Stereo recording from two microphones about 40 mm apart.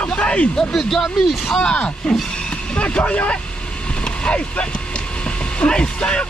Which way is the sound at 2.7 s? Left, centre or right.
Left.